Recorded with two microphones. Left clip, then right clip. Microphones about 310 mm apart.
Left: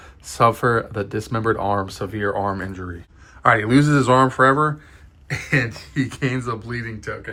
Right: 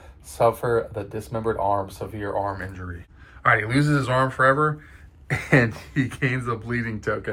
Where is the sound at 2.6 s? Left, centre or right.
Centre.